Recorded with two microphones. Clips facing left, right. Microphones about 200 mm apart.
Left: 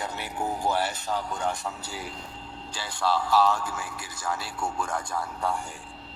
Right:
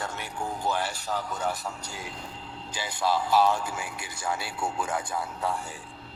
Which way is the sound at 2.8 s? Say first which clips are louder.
Even; 15° right (ahead or behind).